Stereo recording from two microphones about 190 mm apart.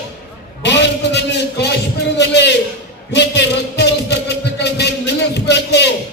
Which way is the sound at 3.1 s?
65° left (ahead or behind).